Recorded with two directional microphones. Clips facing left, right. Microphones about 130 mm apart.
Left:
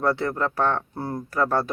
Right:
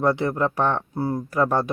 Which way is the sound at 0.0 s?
15° right (ahead or behind).